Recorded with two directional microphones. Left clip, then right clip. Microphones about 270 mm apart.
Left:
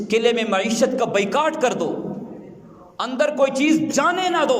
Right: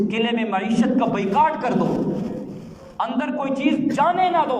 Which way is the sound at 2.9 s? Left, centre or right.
Left.